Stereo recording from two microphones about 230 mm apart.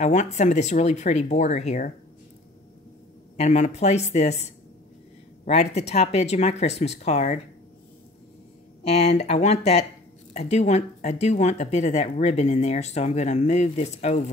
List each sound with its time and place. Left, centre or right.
0.0 s speech: left
3.3 s speech: left
8.8 s speech: left